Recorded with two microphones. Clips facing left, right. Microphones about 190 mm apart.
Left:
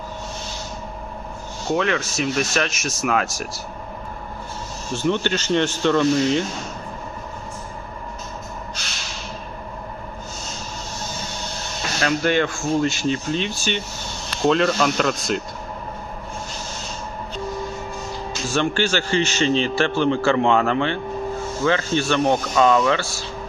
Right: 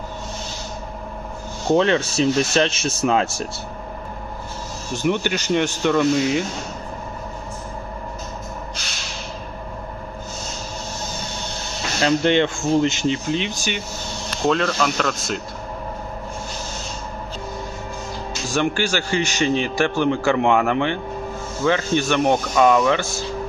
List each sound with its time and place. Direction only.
1.7 s speech: 30° right (ahead or behind)
4.9 s a man's voice: 15° right (ahead or behind)
12.0 s speech: 20° right (ahead or behind)
14.4 s speech: centre (ahead or behind)
18.4 s a man's voice: 15° right (ahead or behind)